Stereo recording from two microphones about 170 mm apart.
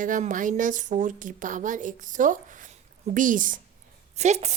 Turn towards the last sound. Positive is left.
turn(degrees=-40)  # may be behind; listen again after turning